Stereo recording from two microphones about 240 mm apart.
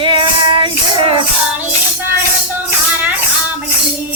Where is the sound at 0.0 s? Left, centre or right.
Right.